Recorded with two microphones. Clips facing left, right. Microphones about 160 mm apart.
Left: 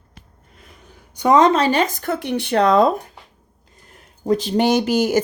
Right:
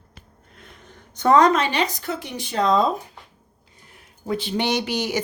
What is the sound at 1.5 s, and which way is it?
Speech, 40° left (ahead or behind).